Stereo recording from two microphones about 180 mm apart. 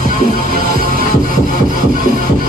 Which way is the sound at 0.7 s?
55° right (ahead or behind).